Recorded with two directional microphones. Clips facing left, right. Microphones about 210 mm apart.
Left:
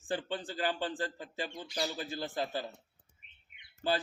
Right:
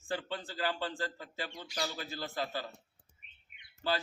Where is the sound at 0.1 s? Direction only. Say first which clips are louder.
Left 2 dB; 20° left (ahead or behind).